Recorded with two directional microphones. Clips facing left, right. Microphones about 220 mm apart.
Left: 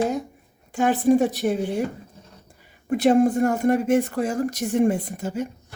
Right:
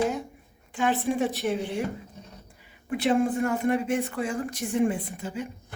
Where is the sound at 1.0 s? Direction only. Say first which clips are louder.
Left 13 dB; 45° left (ahead or behind).